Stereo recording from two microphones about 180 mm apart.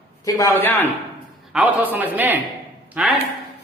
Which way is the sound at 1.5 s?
10° right (ahead or behind).